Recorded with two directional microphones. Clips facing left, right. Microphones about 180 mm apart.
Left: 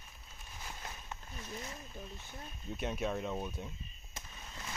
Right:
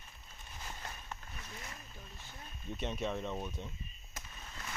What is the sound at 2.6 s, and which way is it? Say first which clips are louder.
Speech: left 1 dB; 5° left (ahead or behind).